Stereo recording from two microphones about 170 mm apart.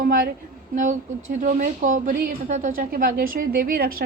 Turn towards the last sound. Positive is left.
turn(degrees=-60)  # may be behind; listen again after turning